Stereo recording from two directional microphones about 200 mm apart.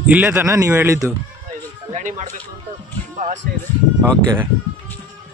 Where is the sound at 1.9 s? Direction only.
35° right (ahead or behind).